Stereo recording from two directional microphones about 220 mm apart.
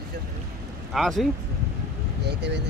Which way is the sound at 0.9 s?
Centre (ahead or behind).